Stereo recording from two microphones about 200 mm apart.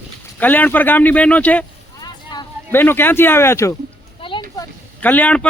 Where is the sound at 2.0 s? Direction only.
20° left (ahead or behind).